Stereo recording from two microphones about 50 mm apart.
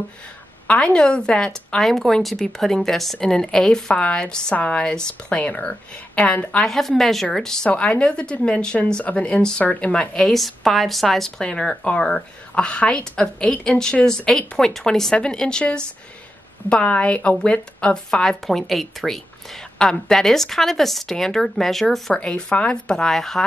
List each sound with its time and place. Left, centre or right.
0.7 s speech: left
1.8 s speech: centre; by 6.6 s left
6.6 s a woman's voice: centre
7.7 s speech: left
10.3 s speech: centre; by 18.2 s left
18.2 s a woman's voice: centre
22.1 s speech: centre